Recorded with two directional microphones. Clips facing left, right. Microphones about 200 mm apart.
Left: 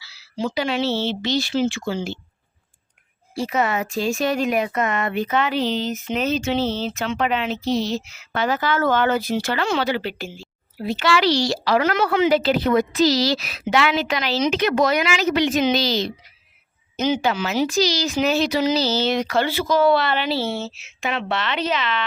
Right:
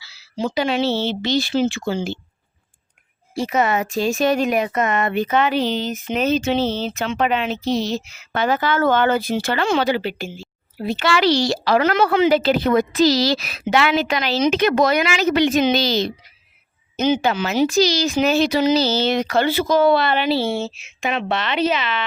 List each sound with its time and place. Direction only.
0.3 s speech: 20° right (ahead or behind)
1.2 s a woman's voice: 50° right (ahead or behind)
1.6 s speech: 25° right (ahead or behind)
3.3 s speech: 20° right (ahead or behind)
4.8 s a woman's voice: 20° right (ahead or behind)
8.4 s a woman's voice: 55° right (ahead or behind)
8.8 s speech: 25° right (ahead or behind)
9.7 s a woman's voice: 15° right (ahead or behind)
10.0 s a woman's voice: centre (ahead or behind)
10.8 s a woman's voice: 55° right (ahead or behind)
19.5 s a woman's voice: 20° right (ahead or behind)